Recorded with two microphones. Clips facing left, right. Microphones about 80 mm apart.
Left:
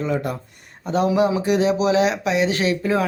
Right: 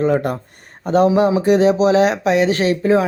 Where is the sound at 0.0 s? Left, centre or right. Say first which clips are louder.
Right 6 dB; right.